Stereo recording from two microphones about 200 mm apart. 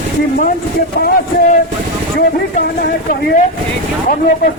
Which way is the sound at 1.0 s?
50° left (ahead or behind).